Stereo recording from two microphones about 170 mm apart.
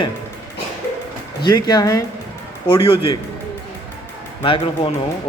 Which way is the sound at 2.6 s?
30° left (ahead or behind).